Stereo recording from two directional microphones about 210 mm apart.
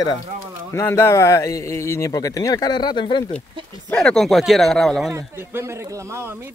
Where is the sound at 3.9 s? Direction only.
5° left (ahead or behind).